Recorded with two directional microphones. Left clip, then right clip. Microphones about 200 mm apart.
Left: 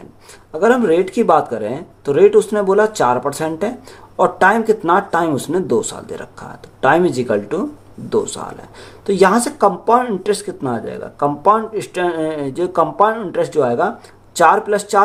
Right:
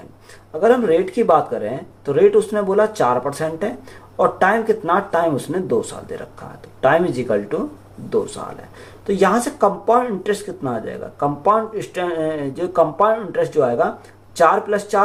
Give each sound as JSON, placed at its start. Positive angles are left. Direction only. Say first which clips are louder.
{"t": 0.6, "sound": "speech", "louder": "left 1 dB", "side_deg": 50}